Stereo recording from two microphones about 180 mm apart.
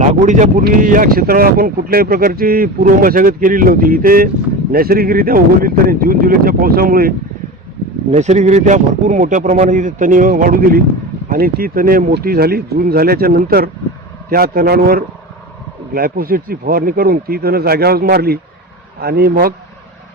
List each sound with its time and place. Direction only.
0.6 s speech: 50° right (ahead or behind)
8.1 s speech: 40° right (ahead or behind); by 19.5 s 55° right (ahead or behind)